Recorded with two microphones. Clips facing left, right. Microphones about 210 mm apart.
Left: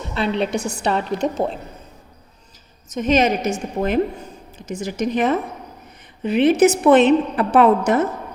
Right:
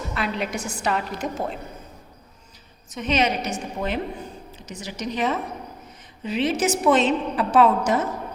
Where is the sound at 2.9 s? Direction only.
45° left (ahead or behind).